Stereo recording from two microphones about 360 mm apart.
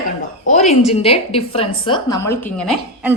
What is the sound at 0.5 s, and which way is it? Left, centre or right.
A woman's voice, centre.